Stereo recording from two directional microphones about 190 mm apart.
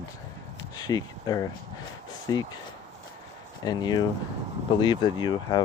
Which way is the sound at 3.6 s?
20° left (ahead or behind).